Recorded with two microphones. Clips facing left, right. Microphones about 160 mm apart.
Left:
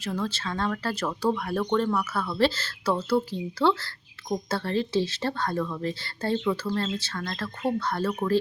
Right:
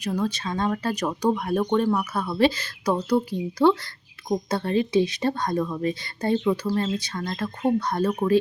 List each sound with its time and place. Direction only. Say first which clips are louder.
0.0 s speech: right 4 dB; 15° right (ahead or behind)